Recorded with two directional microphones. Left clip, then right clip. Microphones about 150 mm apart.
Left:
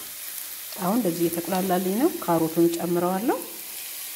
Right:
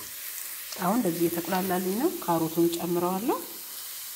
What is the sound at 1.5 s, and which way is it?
Frying, 20° left (ahead or behind).